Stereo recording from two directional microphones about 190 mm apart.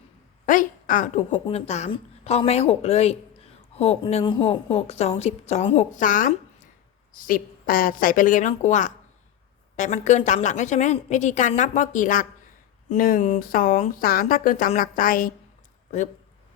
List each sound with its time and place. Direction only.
0.4 s a woman's voice: 45° left (ahead or behind)